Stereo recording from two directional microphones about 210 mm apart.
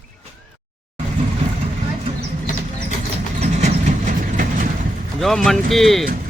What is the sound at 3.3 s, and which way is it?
Vehicle, 35° right (ahead or behind).